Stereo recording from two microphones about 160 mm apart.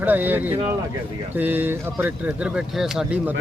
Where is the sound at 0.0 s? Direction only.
10° right (ahead or behind).